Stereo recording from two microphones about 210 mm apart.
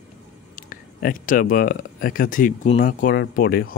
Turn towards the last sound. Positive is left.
turn(degrees=45)  # may be behind; listen again after turning